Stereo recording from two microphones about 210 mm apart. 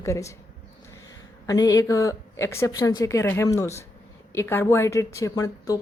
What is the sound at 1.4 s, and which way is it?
A woman's voice, 15° left (ahead or behind).